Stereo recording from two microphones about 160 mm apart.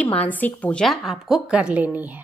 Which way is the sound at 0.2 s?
10° left (ahead or behind).